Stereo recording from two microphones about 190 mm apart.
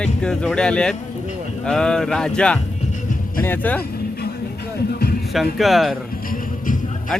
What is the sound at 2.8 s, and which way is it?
Music, 40° left (ahead or behind).